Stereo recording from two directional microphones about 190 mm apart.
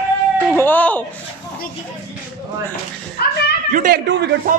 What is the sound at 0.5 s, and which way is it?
Speech, 10° left (ahead or behind).